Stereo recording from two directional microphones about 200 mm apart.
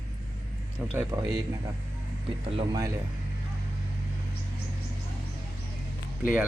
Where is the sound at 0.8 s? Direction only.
5° right (ahead or behind).